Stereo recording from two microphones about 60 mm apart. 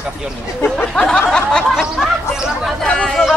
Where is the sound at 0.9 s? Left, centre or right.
Centre.